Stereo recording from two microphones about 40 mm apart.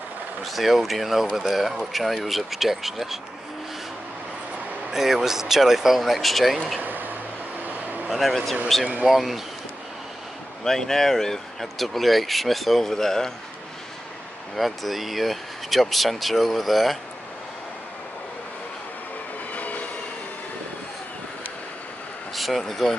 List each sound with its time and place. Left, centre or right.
0.4 s speech: centre
4.9 s speech: centre
6.8 s a sound: right
8.1 s speech: centre
10.6 s speech: centre
14.5 s speech: centre
19.5 s train: left
22.3 s speech: centre